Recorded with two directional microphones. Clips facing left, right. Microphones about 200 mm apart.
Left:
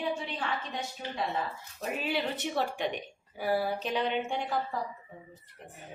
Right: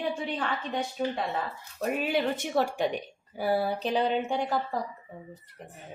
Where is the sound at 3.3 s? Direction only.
35° right (ahead or behind).